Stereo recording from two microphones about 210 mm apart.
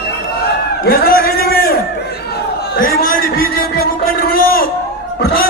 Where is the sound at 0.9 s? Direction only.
45° left (ahead or behind).